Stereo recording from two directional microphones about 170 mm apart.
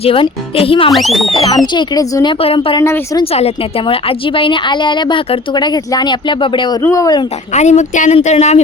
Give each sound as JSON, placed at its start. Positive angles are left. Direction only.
{"t": 0.0, "sound": "speech", "side_deg": 35}
{"t": 0.9, "sound": "speech", "side_deg": 0}
{"t": 1.3, "sound": "a woman's voice", "side_deg": 25}
{"t": 2.4, "sound": "speech", "side_deg": 35}
{"t": 2.8, "sound": "speech", "side_deg": 15}
{"t": 3.3, "sound": "a woman's voice", "side_deg": 35}
{"t": 6.8, "sound": "a woman's voice", "side_deg": 20}
{"t": 7.5, "sound": "a woman's voice", "side_deg": 40}